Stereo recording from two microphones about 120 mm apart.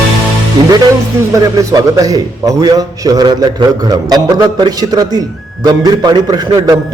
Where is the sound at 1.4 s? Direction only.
30° right (ahead or behind).